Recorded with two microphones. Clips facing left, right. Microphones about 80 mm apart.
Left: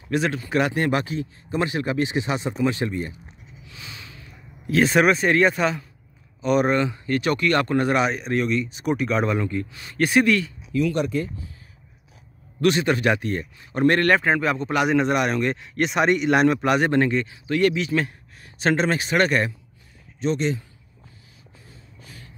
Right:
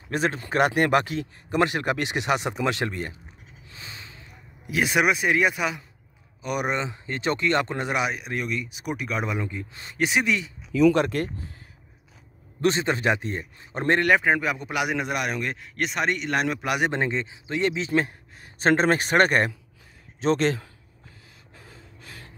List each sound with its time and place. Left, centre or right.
0.1 s speech: right
3.6 s a sound: right
4.6 s speech: centre
9.7 s a man's voice: right
9.9 s speech: centre
11.0 s speech: right
12.5 s a man's voice: right
14.0 s a man's voice: centre
16.8 s a man's voice: centre; by 19.5 s right
20.3 s a man's voice: right